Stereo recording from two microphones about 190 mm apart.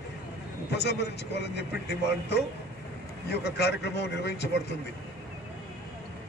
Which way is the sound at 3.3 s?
60° left (ahead or behind).